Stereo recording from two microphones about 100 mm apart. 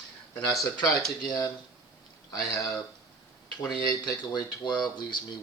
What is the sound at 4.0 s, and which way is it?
Speech, 45° left (ahead or behind).